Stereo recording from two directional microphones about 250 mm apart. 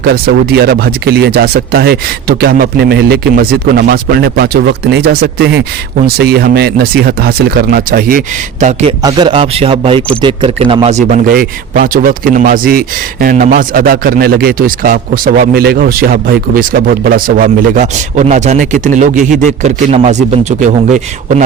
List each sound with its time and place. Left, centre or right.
0.0 s speech: right
8.6 s speech: right